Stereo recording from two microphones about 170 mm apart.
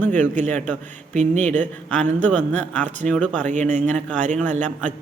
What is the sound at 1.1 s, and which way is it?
Speech, 40° right (ahead or behind).